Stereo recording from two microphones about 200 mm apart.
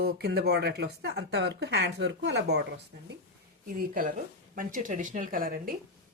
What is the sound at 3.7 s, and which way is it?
Speech, 45° right (ahead or behind).